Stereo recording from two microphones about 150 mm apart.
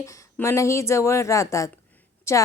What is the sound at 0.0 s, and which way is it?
A woman's voice, 20° left (ahead or behind).